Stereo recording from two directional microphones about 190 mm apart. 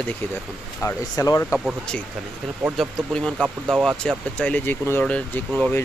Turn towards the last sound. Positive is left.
turn(degrees=10)  # may be behind; listen again after turning